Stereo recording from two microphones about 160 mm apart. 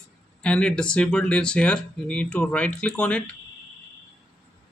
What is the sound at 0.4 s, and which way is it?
Speech, 5° left (ahead or behind).